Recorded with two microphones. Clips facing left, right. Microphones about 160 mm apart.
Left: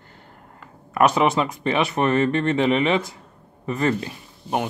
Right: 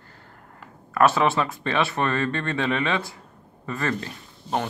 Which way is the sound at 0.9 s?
15° left (ahead or behind).